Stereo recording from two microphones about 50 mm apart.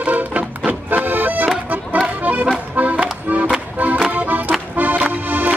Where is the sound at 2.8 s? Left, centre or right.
Right.